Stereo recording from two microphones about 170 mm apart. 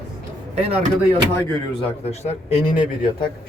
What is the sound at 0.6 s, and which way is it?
Speech, 35° right (ahead or behind).